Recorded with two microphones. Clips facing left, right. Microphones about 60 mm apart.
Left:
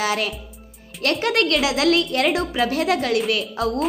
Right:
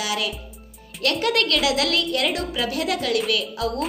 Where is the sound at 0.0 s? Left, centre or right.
Left.